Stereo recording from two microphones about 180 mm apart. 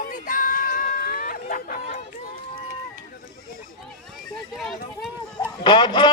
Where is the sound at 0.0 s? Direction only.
50° left (ahead or behind).